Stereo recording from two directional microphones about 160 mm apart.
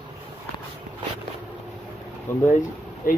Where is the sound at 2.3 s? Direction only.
15° left (ahead or behind).